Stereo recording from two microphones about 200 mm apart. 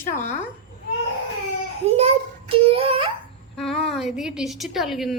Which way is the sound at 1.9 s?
30° right (ahead or behind).